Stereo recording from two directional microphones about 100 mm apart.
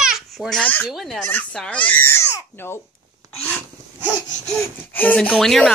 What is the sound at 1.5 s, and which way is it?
Speech, 10° left (ahead or behind).